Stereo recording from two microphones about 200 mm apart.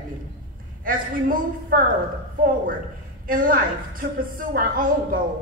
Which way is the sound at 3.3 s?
45° right (ahead or behind).